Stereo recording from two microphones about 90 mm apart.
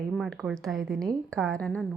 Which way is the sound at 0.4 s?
Centre (ahead or behind).